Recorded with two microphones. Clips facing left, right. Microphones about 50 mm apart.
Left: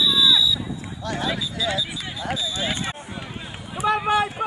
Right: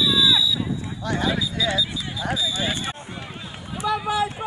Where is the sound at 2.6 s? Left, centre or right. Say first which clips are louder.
Even; left.